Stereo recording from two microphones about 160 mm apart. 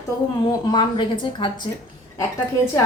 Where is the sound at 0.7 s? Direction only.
30° left (ahead or behind).